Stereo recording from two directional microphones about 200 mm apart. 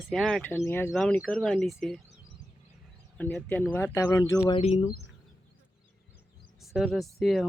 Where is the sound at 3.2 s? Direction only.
10° left (ahead or behind).